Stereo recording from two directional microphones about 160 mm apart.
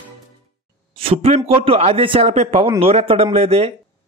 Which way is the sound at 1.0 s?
40° right (ahead or behind).